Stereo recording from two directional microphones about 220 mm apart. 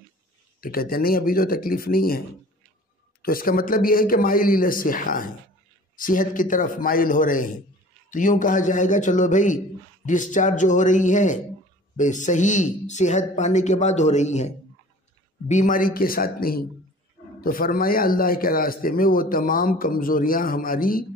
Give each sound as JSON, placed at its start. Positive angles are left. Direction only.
{"t": 0.6, "sound": "a man's voice", "side_deg": 40}